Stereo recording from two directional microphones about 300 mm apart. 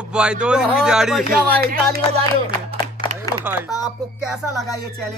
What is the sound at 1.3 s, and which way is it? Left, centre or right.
Speech, right.